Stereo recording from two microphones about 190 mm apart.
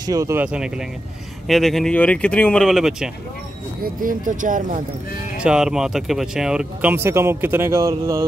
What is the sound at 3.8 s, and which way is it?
Speech, 45° right (ahead or behind).